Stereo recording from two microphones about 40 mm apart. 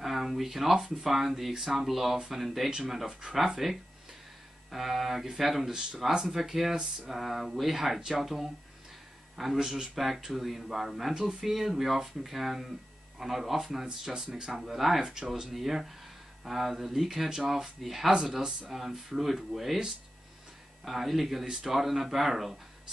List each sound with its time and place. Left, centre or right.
0.0 s speech: centre
3.1 s speech: right
3.3 s speech: centre
15.0 s speech: centre
20.8 s speech: centre